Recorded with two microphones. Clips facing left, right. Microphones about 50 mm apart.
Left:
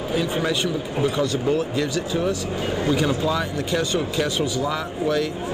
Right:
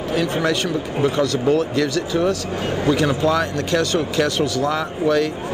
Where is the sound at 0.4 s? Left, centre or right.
Right.